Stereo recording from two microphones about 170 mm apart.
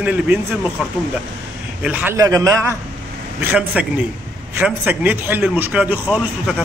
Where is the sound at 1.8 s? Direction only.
10° right (ahead or behind).